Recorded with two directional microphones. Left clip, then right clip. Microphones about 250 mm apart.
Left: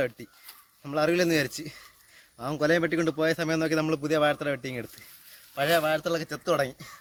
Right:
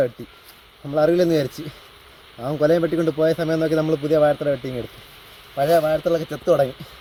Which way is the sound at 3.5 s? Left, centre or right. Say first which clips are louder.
Right 6 dB; left.